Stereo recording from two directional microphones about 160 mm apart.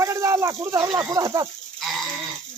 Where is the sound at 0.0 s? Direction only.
20° right (ahead or behind).